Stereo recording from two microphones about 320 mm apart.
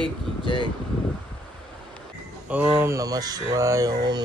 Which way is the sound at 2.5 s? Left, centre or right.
Centre.